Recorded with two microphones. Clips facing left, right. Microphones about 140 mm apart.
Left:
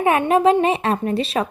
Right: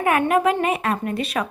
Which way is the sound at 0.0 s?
25° left (ahead or behind).